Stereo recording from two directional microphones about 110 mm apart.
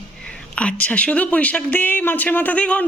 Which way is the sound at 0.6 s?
10° left (ahead or behind).